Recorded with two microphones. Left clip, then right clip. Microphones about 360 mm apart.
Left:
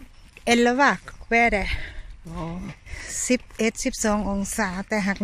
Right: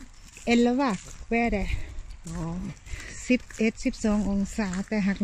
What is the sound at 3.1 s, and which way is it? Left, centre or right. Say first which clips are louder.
Speech: left 3 dB; left.